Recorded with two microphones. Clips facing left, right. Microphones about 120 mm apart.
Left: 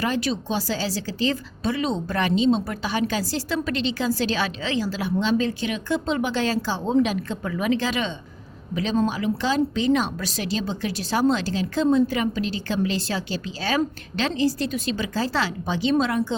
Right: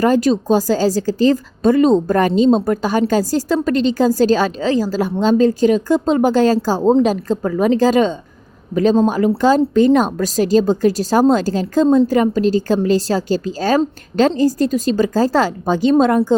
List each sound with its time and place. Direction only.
0.0 s speech: 40° right (ahead or behind)